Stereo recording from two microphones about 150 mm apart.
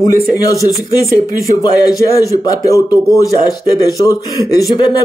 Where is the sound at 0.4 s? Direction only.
25° left (ahead or behind).